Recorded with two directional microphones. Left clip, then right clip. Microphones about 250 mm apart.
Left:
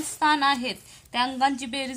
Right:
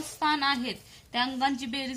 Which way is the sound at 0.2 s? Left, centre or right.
Left.